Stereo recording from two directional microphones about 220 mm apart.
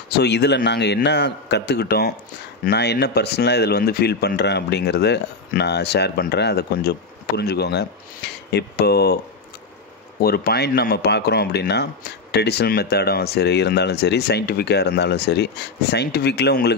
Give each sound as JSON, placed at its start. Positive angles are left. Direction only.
{"t": 0.1, "sound": "speech", "side_deg": 50}
{"t": 10.2, "sound": "speech", "side_deg": 45}